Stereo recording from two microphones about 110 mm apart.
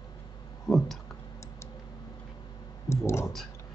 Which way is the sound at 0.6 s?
Centre (ahead or behind).